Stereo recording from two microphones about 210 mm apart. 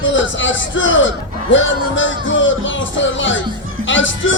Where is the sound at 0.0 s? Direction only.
65° left (ahead or behind).